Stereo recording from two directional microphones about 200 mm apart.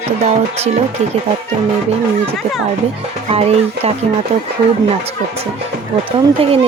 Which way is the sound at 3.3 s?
30° right (ahead or behind).